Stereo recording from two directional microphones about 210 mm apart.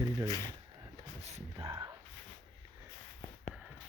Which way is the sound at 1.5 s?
20° right (ahead or behind).